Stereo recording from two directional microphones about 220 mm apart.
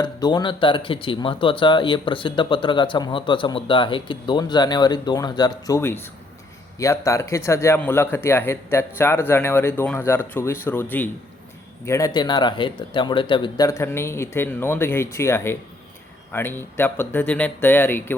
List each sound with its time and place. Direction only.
0.0 s speech: 20° left (ahead or behind)